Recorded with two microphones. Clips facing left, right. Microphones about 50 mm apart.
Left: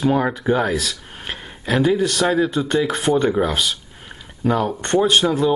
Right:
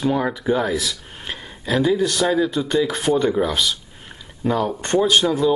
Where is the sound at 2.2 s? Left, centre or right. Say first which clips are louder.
Left 1 dB; left.